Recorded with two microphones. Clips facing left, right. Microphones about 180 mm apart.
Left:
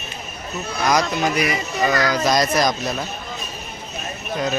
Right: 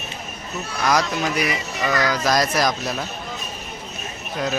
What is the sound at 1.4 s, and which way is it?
Music, 45° left (ahead or behind).